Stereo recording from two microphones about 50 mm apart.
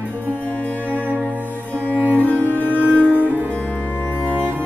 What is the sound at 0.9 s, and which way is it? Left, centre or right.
Music, right.